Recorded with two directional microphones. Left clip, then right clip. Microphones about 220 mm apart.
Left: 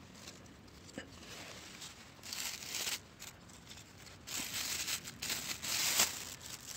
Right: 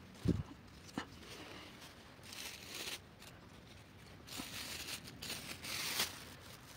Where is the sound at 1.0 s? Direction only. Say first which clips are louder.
Right 3 dB; 30° right (ahead or behind).